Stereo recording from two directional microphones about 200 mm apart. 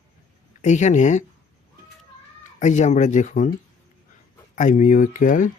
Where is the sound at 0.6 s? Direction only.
35° left (ahead or behind).